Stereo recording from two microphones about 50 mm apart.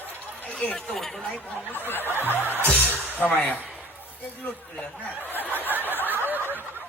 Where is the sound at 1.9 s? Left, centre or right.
Left.